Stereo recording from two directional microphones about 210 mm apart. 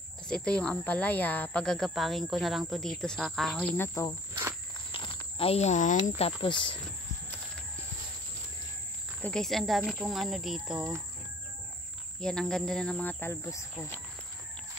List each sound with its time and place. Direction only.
0.3 s speech: 5° left (ahead or behind)
4.9 s a sound: 25° left (ahead or behind)
6.0 s speech: 30° left (ahead or behind)
9.2 s speech: 5° left (ahead or behind)
12.2 s speech: 5° left (ahead or behind)